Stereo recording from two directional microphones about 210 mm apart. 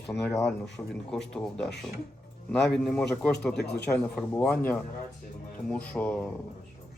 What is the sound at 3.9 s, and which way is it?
A man's voice, 5° left (ahead or behind).